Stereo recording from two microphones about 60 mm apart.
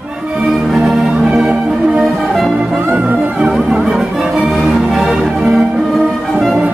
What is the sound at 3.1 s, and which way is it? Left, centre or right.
Music, right.